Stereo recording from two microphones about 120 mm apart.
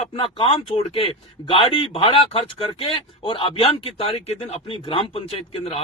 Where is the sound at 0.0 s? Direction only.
50° left (ahead or behind).